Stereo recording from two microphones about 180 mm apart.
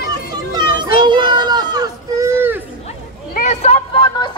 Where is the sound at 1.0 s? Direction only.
25° right (ahead or behind).